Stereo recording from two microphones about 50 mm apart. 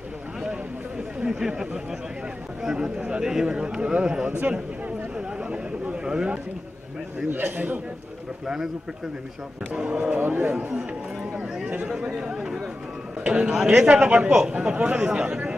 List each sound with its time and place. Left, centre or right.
0.4 s a sound: centre
2.6 s speech: centre
4.4 s a man's voice: right
7.2 s a man's voice: right
9.8 s speech: right
10.2 s a man's voice: right
11.3 s chatter: centre
13.2 s speech: right
13.5 s speech: centre
13.7 s speech: right